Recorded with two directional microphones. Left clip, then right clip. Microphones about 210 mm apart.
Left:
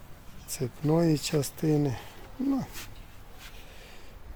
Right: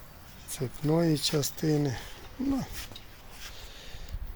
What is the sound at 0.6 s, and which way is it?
Speech, 15° left (ahead or behind).